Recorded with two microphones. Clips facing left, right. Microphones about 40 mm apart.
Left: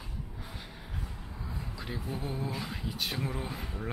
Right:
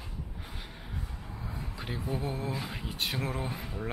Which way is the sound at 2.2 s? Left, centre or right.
Centre.